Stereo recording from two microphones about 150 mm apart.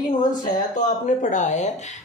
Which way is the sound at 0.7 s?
55° left (ahead or behind).